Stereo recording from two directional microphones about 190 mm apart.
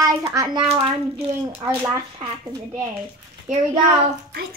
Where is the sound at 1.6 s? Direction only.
15° right (ahead or behind).